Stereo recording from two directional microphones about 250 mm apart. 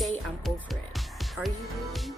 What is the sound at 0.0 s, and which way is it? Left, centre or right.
Music, centre.